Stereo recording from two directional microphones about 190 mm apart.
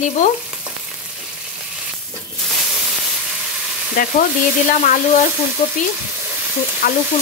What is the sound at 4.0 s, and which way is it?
Frying, 45° left (ahead or behind).